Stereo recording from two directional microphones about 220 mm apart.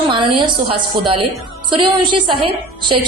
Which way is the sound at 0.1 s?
20° right (ahead or behind).